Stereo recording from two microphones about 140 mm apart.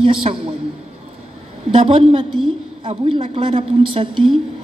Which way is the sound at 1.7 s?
45° right (ahead or behind).